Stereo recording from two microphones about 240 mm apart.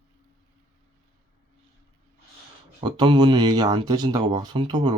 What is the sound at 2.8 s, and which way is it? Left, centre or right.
Speech, centre.